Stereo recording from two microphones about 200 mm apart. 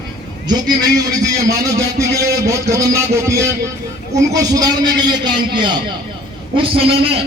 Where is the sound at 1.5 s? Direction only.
15° right (ahead or behind).